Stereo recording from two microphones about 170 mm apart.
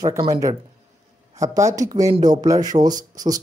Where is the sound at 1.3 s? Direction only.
20° right (ahead or behind).